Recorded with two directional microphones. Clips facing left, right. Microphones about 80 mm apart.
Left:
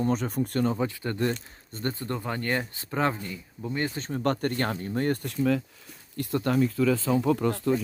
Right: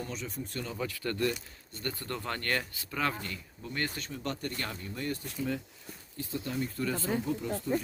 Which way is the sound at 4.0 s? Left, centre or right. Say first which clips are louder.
Left 10 dB; left.